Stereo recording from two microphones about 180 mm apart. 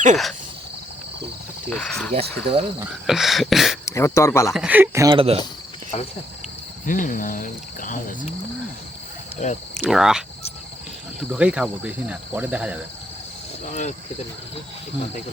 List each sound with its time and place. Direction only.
1.7 s a sound: 5° left (ahead or behind)
2.1 s speech: 30° right (ahead or behind)
3.1 s a sound: centre (ahead or behind)
3.8 s speech: 15° left (ahead or behind)
4.5 s speech: 5° right (ahead or behind)
5.1 s speech: 30° right (ahead or behind)
5.9 s speech: 35° left (ahead or behind)
6.8 s speech: 45° left (ahead or behind)
9.4 s speech: 40° left (ahead or behind)
9.7 s a sound: centre (ahead or behind)
11.2 s speech: 5° right (ahead or behind)
13.7 s speech: 40° left (ahead or behind)